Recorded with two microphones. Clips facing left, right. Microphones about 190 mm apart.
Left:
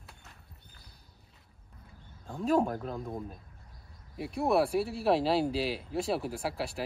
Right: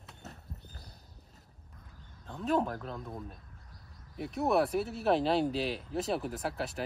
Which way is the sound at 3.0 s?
20° left (ahead or behind).